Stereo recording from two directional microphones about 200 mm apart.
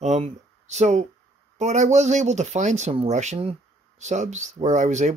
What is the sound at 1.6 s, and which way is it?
Speech, 35° right (ahead or behind).